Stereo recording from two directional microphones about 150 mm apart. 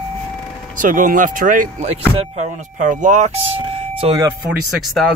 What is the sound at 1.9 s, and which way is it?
Speech, 45° right (ahead or behind).